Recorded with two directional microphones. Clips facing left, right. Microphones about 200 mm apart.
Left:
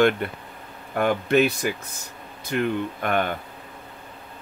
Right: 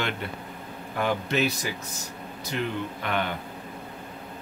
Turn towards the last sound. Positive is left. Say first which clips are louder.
# left 4 dB
turn(degrees=50)  # may be behind; listen again after turning